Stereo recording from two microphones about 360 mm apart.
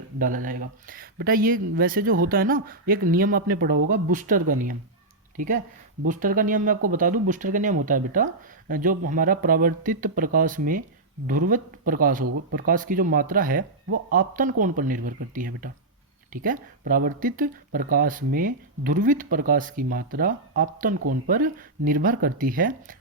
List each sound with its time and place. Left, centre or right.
0.2 s speech: right
6.1 s speech: right